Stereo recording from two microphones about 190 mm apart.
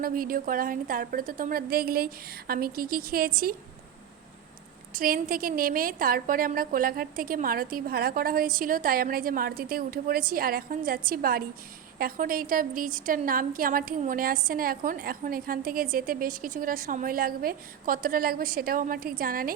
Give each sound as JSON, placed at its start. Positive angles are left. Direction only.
{"t": 0.0, "sound": "a woman's voice", "side_deg": -50}
{"t": 4.9, "sound": "a woman's voice", "side_deg": -50}